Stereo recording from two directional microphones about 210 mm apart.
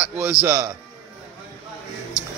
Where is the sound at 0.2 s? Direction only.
10° right (ahead or behind).